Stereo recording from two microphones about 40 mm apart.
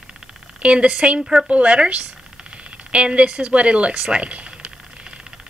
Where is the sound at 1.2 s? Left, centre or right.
Centre.